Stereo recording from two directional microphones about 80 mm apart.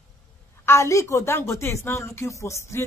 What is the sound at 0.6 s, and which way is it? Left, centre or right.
A woman's voice, left.